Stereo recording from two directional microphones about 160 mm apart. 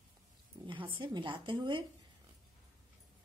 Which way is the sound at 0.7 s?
30° right (ahead or behind).